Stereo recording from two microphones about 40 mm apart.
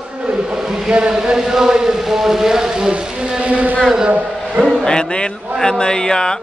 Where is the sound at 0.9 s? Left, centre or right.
Right.